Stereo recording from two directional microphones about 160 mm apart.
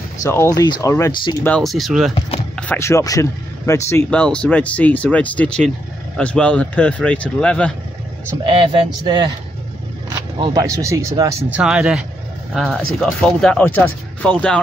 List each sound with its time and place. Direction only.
0.2 s speech: 20° left (ahead or behind)
1.4 s speech: 5° left (ahead or behind)
2.6 s speech: 15° left (ahead or behind)
4.1 s speech: 10° left (ahead or behind)
8.5 s speech: 30° right (ahead or behind)
10.3 s speech: 25° right (ahead or behind)
11.5 s speech: 5° right (ahead or behind)